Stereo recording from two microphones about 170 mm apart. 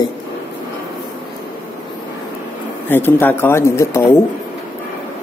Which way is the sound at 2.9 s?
10° left (ahead or behind).